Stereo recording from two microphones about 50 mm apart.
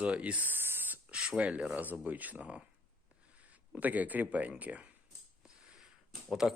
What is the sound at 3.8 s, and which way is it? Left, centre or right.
Speech, right.